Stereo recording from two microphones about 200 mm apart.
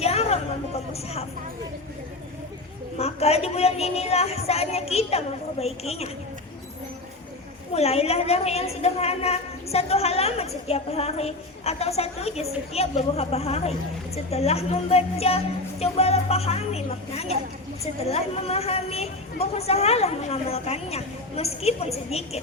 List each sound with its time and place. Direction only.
0.0 s a sound: 30° left (ahead or behind)
3.0 s a woman's voice: 30° left (ahead or behind)
7.7 s a woman's voice: 30° left (ahead or behind)